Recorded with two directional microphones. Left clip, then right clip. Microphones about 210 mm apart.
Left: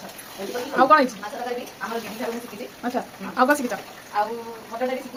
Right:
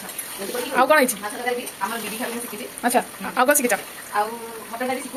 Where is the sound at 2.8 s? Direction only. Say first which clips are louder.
Right 7 dB; 5° right (ahead or behind).